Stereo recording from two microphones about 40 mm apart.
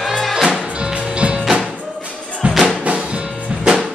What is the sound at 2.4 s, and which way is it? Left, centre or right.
Music, right.